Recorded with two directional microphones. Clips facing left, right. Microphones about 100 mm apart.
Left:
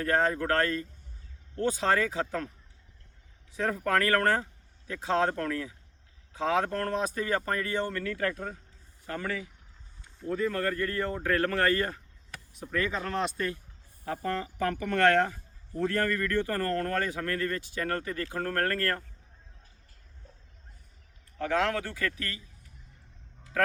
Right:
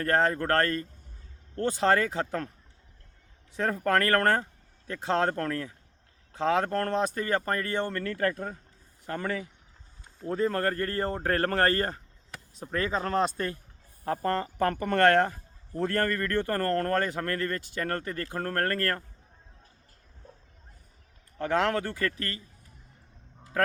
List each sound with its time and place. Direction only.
0.0 s speech: 50° right (ahead or behind)
3.5 s speech: 45° right (ahead or behind)
21.3 s speech: 45° right (ahead or behind)